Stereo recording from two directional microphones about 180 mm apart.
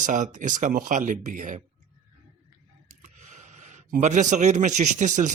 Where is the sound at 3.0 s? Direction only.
40° right (ahead or behind).